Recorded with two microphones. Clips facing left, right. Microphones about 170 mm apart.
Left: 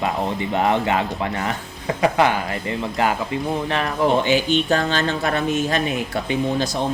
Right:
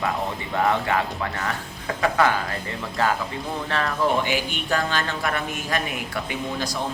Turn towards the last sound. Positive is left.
turn(degrees=25)  # may be behind; listen again after turning